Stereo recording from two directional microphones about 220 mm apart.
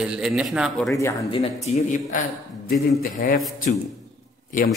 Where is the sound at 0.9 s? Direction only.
15° left (ahead or behind).